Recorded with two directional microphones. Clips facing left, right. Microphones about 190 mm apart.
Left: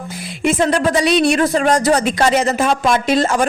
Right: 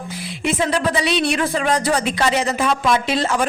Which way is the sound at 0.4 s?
45° left (ahead or behind).